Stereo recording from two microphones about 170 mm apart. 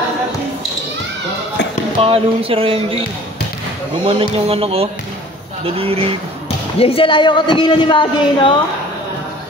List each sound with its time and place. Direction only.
2.0 s speech: 35° right (ahead or behind)
4.1 s speech: 35° right (ahead or behind)
6.8 s speech: 35° left (ahead or behind)